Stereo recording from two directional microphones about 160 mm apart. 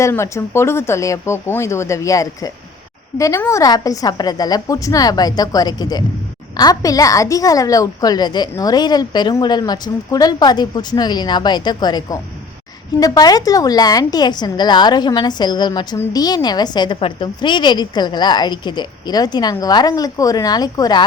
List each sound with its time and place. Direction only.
0.0 s a woman's voice: 15° left (ahead or behind)